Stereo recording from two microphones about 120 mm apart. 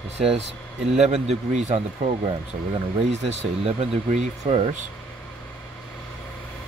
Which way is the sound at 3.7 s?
65° right (ahead or behind).